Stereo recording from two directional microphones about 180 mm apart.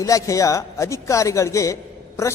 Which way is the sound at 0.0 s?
20° left (ahead or behind).